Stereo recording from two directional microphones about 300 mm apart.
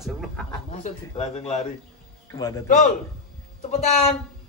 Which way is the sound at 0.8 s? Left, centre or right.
Left.